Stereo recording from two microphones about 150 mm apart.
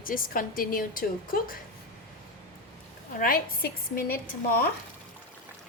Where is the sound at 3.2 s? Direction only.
75° left (ahead or behind).